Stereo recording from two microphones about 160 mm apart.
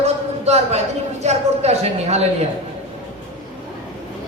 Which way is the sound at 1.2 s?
40° right (ahead or behind).